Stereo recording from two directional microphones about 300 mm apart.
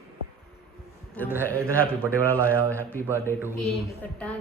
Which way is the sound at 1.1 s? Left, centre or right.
Centre.